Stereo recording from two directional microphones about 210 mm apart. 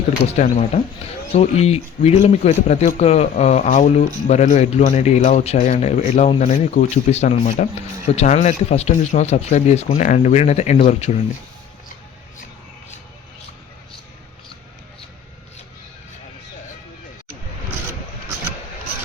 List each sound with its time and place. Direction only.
0.3 s a man's voice: 35° left (ahead or behind)